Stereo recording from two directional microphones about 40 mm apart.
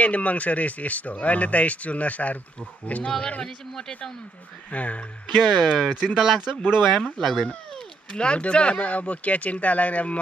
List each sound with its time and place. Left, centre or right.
0.0 s speech: left
3.2 s speech: left
4.6 s speech: left
5.4 s speech: centre
7.2 s speech: centre
8.1 s speech: left